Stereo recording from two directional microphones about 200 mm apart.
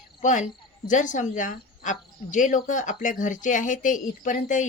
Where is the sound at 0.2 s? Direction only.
40° left (ahead or behind).